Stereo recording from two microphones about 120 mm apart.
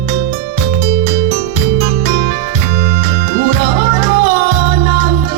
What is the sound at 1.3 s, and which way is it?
Music, 75° right (ahead or behind).